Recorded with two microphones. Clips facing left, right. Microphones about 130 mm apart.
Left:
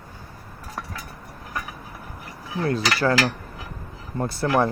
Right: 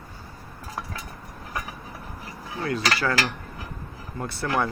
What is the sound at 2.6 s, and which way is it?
Cutlery, 35° left (ahead or behind).